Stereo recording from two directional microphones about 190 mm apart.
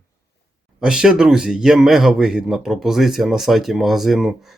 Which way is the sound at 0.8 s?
5° right (ahead or behind).